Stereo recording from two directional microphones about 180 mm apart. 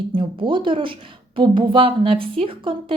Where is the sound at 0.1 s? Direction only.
25° right (ahead or behind).